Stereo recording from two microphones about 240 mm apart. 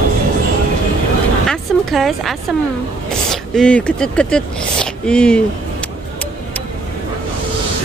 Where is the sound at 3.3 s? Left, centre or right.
Centre.